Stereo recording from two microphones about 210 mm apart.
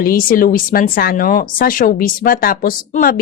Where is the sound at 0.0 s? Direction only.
40° left (ahead or behind).